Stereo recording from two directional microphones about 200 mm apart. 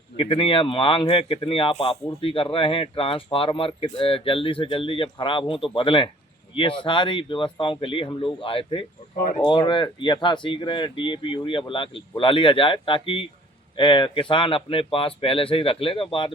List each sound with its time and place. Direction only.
0.2 s speech: 25° left (ahead or behind)
9.1 s speech: 40° left (ahead or behind)
9.4 s speech: 25° left (ahead or behind)